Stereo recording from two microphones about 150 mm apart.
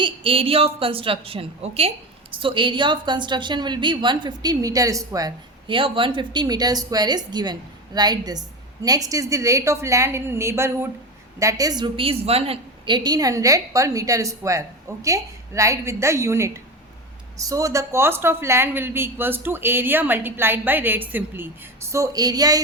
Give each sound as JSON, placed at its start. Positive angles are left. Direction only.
{"t": 0.0, "sound": "a woman's voice", "side_deg": -35}